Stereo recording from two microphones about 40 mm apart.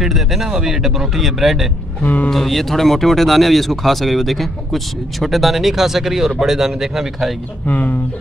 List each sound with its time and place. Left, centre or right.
0.0 s speech: centre
2.3 s speech: centre
7.6 s speech: left